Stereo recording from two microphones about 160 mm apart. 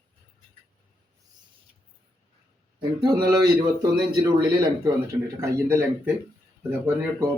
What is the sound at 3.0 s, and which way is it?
Speech, 25° right (ahead or behind).